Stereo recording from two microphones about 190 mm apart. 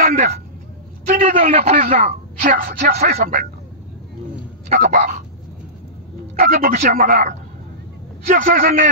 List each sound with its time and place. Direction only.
0.0 s a woman's voice: 40° right (ahead or behind)
4.7 s a woman's voice: 50° right (ahead or behind)
6.3 s a woman's voice: 50° right (ahead or behind)